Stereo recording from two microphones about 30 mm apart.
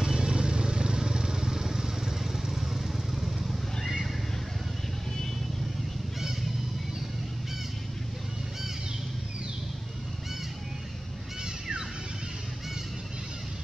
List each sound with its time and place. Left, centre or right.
0.0 s vehicle: right; by 3.9 s centre